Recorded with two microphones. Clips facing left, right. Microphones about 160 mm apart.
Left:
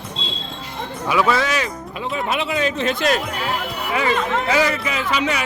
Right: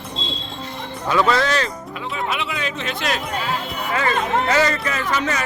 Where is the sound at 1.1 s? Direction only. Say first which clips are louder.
Right 1 dB; 5° left (ahead or behind).